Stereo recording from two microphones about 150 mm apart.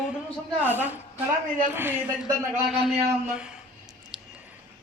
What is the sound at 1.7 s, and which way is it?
Speech, 15° right (ahead or behind).